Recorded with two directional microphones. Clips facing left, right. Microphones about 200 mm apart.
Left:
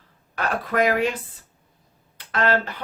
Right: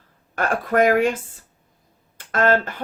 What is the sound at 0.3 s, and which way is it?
A woman's voice, 45° right (ahead or behind).